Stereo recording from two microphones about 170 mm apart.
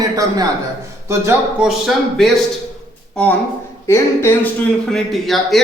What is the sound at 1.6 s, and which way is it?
A man's voice, centre (ahead or behind).